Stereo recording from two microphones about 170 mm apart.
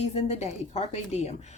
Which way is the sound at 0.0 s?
40° left (ahead or behind).